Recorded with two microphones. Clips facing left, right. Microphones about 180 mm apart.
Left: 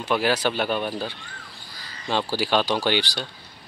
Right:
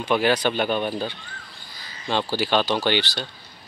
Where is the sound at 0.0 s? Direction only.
5° left (ahead or behind).